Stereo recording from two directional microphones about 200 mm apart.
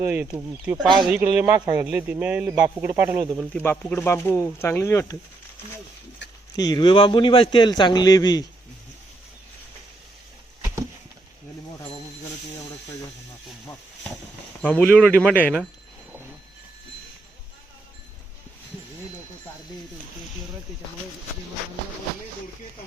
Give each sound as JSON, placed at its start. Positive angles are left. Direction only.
{"t": 0.0, "sound": "speech", "side_deg": -10}
{"t": 3.5, "sound": "speech", "side_deg": 10}
{"t": 6.6, "sound": "a man's voice", "side_deg": 20}
{"t": 14.6, "sound": "speech", "side_deg": 5}